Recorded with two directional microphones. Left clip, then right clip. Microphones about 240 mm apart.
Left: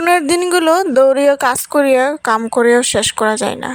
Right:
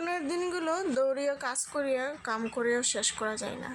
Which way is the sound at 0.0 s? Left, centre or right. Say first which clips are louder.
Left 19 dB; left.